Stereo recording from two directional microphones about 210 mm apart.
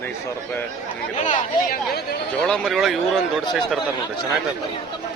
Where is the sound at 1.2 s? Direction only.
35° left (ahead or behind).